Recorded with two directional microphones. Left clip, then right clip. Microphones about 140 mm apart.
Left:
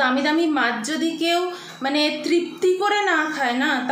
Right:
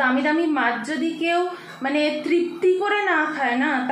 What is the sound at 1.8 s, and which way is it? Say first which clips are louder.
A woman's voice: left 1 dB; 20° left (ahead or behind).